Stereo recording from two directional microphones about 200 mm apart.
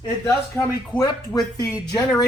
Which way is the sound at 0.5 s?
20° left (ahead or behind).